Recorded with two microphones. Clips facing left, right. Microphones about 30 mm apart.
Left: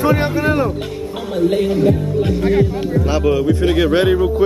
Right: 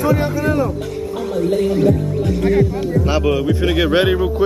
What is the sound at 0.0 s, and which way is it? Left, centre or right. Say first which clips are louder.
Speech: left 1 dB; left.